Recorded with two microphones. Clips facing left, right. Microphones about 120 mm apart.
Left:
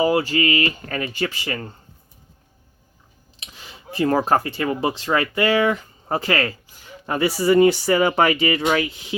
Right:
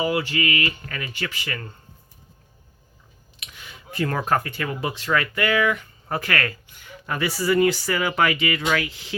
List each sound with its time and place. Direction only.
0.0 s speech: 35° left (ahead or behind)
3.4 s speech: 30° left (ahead or behind)